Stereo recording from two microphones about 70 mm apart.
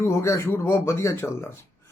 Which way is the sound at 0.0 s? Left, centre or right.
Left.